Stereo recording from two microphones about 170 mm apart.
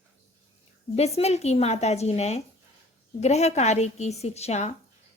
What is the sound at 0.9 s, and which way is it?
Speech, 40° left (ahead or behind).